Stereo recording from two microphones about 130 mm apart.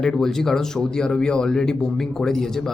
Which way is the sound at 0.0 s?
5° left (ahead or behind).